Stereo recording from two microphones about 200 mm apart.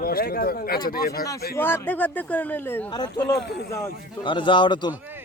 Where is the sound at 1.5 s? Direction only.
10° left (ahead or behind).